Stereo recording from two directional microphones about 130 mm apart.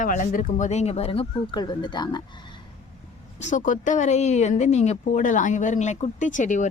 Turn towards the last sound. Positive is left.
turn(degrees=75)  # may be behind; listen again after turning